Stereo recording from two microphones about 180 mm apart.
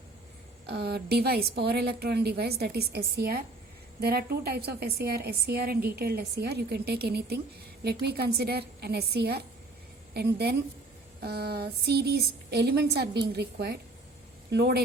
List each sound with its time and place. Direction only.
0.7 s a woman's voice: 65° right (ahead or behind)